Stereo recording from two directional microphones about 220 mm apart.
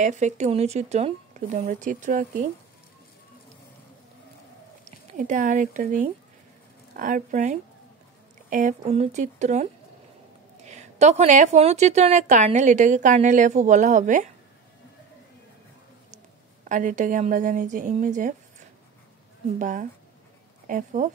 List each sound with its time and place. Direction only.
0.0 s a woman's voice: 35° right (ahead or behind)
5.1 s a woman's voice: 35° right (ahead or behind)
16.6 s a woman's voice: 35° right (ahead or behind)
19.6 s a woman's voice: 35° right (ahead or behind)